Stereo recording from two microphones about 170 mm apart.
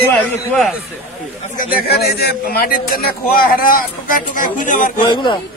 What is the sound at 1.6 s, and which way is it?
A man's voice, 60° left (ahead or behind).